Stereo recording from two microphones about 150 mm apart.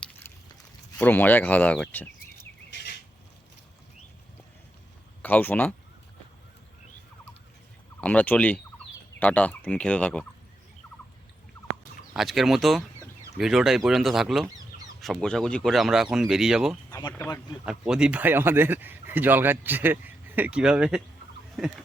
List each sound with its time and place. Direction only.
0.2 s a sound: 15° left (ahead or behind)
0.9 s speech: 10° left (ahead or behind)
5.2 s speech: 10° left (ahead or behind)
8.0 s speech: 10° left (ahead or behind)
12.1 s speech: centre (ahead or behind)
16.9 s speech: 25° left (ahead or behind)
17.7 s speech: 5° right (ahead or behind)